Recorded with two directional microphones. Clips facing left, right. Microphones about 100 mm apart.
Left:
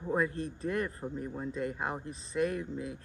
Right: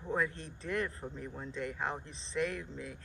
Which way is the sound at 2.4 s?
35° left (ahead or behind).